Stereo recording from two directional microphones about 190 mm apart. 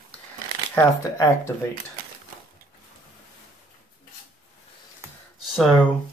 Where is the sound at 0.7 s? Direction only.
15° left (ahead or behind).